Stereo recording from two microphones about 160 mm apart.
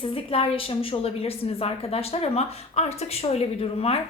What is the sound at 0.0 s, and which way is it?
A woman's voice, 35° left (ahead or behind).